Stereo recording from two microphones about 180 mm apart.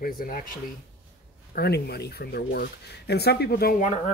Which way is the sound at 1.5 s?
60° left (ahead or behind).